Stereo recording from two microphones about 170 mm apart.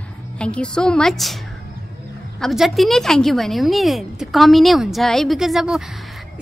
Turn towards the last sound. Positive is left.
turn(degrees=0)  # may be behind; listen again after turning